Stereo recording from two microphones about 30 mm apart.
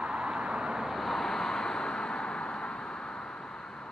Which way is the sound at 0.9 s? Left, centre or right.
Centre.